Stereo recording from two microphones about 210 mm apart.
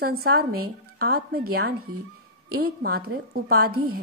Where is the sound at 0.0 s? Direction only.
45° right (ahead or behind).